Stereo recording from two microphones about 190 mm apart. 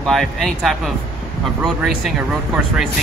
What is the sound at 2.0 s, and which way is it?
Speech, centre (ahead or behind).